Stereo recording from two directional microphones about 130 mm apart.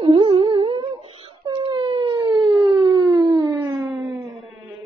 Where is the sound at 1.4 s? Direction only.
35° right (ahead or behind).